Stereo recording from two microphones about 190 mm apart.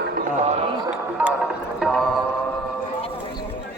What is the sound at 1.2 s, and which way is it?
Music, 10° right (ahead or behind).